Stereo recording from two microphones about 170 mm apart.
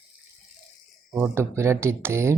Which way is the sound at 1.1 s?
15° right (ahead or behind).